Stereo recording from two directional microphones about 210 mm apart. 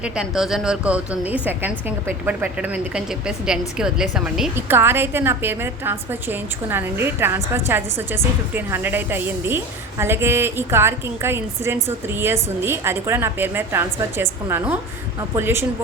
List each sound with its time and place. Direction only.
0.0 s a woman's voice: centre (ahead or behind)